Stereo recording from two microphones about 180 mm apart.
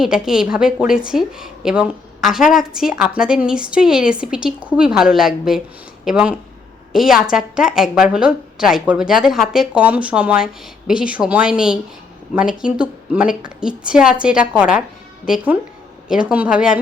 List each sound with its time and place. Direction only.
0.0 s a woman's voice: 5° right (ahead or behind)
16.0 s a woman's voice: 5° right (ahead or behind)